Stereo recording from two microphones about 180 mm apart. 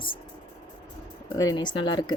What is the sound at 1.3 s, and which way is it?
Speech, 20° left (ahead or behind).